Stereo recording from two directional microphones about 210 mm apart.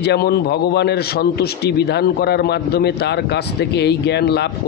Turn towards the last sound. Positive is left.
turn(degrees=50)  # may be behind; listen again after turning